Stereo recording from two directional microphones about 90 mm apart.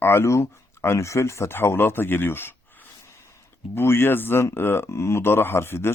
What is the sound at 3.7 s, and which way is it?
Speech, 25° left (ahead or behind).